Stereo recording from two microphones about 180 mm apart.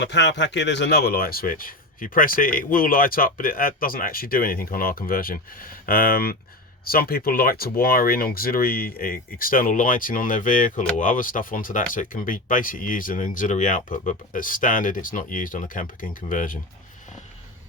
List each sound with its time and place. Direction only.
0.0 s speech: 80° left; by 16.6 s 45° left (ahead or behind)